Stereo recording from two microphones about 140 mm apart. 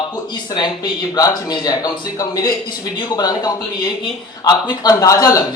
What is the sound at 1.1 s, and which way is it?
Speech, 30° left (ahead or behind).